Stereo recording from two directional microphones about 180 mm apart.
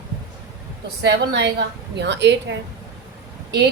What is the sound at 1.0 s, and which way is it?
A woman's voice, 70° right (ahead or behind).